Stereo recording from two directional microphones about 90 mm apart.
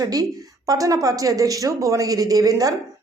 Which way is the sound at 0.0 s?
45° right (ahead or behind).